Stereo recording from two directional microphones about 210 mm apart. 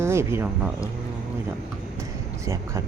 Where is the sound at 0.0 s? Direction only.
10° right (ahead or behind).